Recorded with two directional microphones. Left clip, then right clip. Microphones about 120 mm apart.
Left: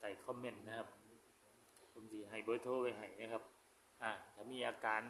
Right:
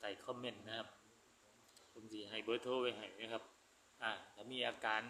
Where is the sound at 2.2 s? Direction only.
5° left (ahead or behind).